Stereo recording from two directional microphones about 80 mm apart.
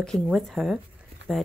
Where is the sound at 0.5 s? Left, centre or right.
Centre.